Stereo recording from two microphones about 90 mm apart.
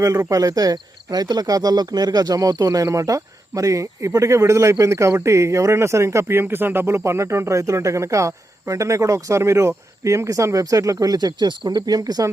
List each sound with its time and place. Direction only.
0.3 s speech: 40° right (ahead or behind)